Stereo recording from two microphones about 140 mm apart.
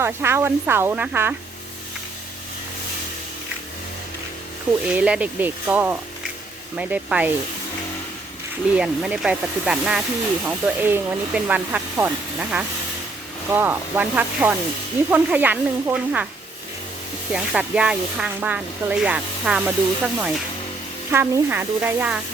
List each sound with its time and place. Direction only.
0.0 s speech: 15° right (ahead or behind)
4.9 s speech: 10° right (ahead or behind)
8.7 s speech: 10° right (ahead or behind)
17.3 s speech: 5° right (ahead or behind)